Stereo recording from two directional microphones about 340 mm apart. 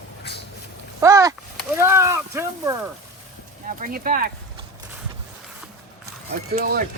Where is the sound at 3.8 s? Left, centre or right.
Right.